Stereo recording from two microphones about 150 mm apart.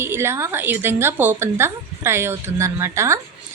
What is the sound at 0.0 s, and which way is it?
A woman's voice, 15° right (ahead or behind).